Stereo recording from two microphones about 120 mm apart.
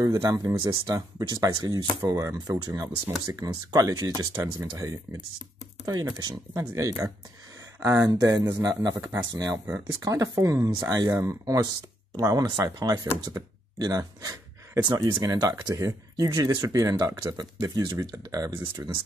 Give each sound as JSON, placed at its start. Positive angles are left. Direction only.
{"t": 0.0, "sound": "speech", "side_deg": -30}
{"t": 18.6, "sound": "speech", "side_deg": -15}